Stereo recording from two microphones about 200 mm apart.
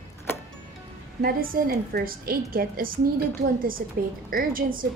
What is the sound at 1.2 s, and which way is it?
A woman's voice, 45° right (ahead or behind).